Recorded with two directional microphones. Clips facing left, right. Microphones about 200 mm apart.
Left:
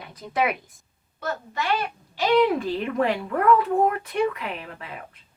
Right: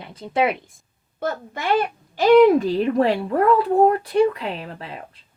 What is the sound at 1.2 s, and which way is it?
Speech, 55° right (ahead or behind).